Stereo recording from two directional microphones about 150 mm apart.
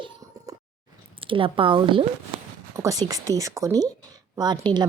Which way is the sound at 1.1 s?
35° right (ahead or behind).